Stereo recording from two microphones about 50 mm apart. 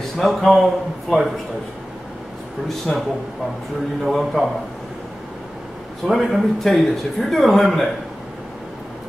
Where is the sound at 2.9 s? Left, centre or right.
Centre.